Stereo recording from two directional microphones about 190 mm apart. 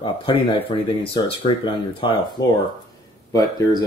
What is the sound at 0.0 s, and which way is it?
Speech, 25° left (ahead or behind).